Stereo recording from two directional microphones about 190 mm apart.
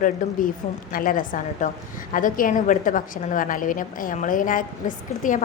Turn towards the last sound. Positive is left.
turn(degrees=45)  # may be behind; listen again after turning